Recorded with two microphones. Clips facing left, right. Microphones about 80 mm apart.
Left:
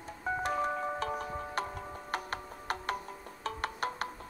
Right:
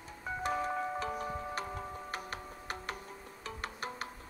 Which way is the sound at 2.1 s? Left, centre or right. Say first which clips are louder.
Left 4 dB; left.